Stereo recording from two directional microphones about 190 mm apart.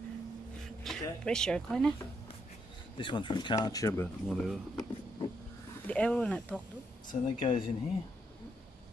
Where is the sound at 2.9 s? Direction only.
25° left (ahead or behind).